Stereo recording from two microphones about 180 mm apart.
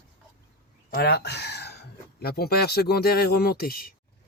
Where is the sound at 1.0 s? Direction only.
65° left (ahead or behind).